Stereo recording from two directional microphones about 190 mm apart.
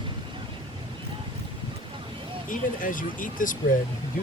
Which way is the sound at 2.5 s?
45° left (ahead or behind).